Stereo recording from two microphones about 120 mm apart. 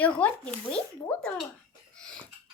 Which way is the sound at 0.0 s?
10° left (ahead or behind).